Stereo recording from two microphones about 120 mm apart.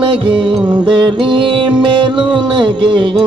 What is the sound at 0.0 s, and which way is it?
Music, 45° right (ahead or behind).